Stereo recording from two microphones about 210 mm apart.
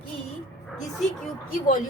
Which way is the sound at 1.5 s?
40° left (ahead or behind).